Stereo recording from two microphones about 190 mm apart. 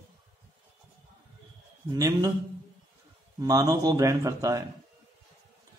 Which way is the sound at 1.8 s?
20° right (ahead or behind).